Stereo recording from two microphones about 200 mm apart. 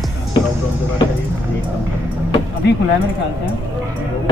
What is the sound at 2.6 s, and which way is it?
Speech, 55° left (ahead or behind).